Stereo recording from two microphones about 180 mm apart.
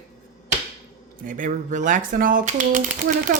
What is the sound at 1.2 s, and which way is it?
Speech, 50° right (ahead or behind).